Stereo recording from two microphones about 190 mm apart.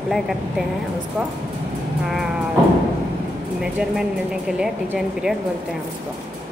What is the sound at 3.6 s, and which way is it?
Speech, 5° right (ahead or behind).